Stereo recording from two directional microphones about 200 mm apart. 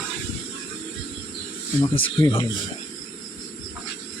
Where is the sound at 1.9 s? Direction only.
25° left (ahead or behind).